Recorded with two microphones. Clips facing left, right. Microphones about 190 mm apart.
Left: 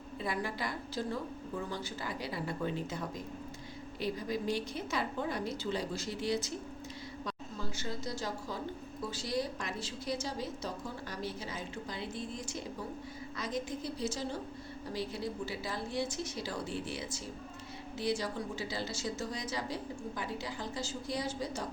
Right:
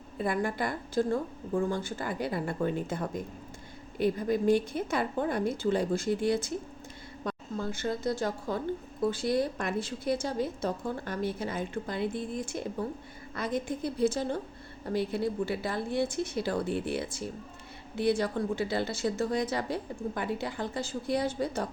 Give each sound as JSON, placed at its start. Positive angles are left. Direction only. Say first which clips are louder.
{"t": 0.2, "sound": "a woman's voice", "louder": "right 7 dB", "side_deg": -50}